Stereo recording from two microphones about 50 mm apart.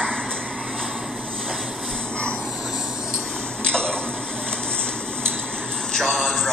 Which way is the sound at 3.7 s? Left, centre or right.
Centre.